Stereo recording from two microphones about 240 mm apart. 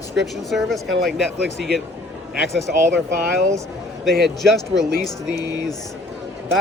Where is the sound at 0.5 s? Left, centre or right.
Centre.